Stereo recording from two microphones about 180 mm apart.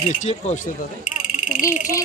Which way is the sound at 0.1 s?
40° left (ahead or behind).